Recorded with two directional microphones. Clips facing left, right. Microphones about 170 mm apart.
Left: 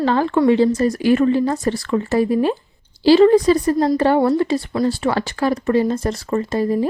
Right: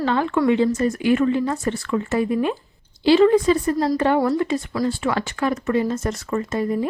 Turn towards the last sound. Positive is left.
turn(degrees=30)  # may be behind; listen again after turning